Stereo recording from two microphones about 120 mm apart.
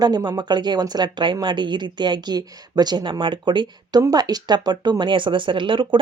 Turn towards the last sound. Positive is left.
turn(degrees=-45)  # may be behind; listen again after turning